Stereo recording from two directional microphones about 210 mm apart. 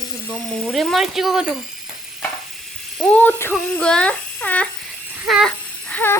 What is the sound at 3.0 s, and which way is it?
Speech, 5° left (ahead or behind).